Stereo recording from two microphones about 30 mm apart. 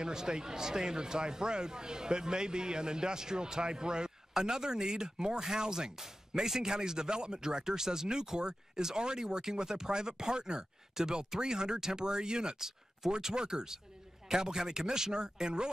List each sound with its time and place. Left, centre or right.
0.0 s a man's voice: right
12.5 s speech: centre
13.1 s a man's voice: right